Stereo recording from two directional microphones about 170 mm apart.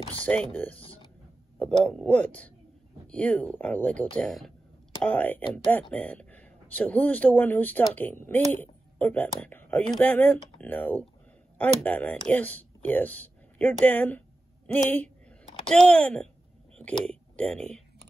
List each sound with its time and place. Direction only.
0.2 s speech: 10° left (ahead or behind)
0.7 s a sound: 35° left (ahead or behind)
1.6 s speech: 5° left (ahead or behind)